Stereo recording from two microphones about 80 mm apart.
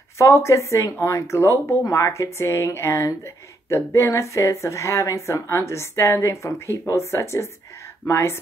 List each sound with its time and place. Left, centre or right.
0.2 s a woman's voice: left